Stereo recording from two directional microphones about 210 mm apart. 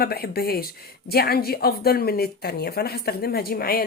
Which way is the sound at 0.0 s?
50° left (ahead or behind).